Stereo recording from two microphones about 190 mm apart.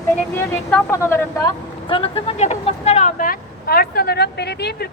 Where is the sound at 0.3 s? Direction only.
10° left (ahead or behind).